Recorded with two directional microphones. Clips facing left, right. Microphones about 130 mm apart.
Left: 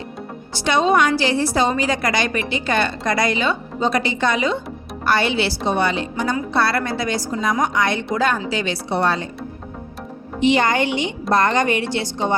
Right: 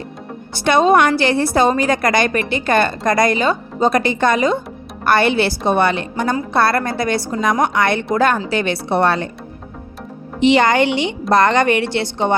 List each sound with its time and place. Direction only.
0.5 s a woman's voice: 55° right (ahead or behind)
10.4 s a woman's voice: 75° right (ahead or behind)